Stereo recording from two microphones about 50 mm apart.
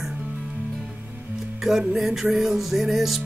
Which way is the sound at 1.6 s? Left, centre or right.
Centre.